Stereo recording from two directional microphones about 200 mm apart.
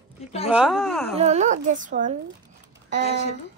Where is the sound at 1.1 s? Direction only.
35° right (ahead or behind).